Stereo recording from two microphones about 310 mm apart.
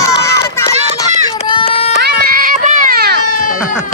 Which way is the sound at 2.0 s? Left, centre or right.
Right.